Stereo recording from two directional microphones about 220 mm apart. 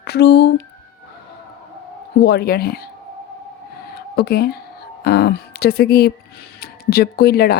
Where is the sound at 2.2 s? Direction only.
50° left (ahead or behind).